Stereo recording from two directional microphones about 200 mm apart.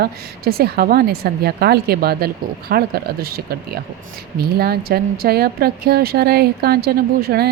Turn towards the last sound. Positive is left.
turn(degrees=-50)  # may be behind; listen again after turning